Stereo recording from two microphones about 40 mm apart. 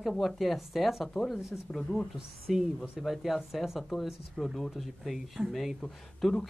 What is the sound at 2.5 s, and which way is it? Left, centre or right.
Speech, centre.